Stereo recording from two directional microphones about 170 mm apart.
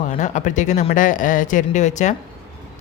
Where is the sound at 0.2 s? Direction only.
45° left (ahead or behind).